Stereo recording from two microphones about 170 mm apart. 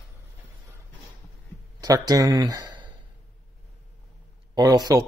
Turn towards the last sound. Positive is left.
turn(degrees=-20)  # may be behind; listen again after turning